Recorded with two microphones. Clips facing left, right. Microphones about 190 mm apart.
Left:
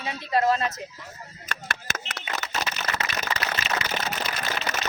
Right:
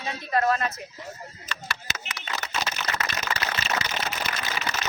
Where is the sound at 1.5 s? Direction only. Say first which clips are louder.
Left 3 dB; 50° left (ahead or behind).